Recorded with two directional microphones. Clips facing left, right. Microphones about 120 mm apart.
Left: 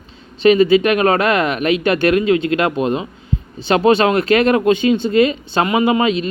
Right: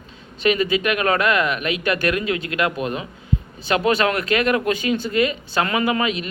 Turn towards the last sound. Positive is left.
turn(degrees=30)  # may be behind; listen again after turning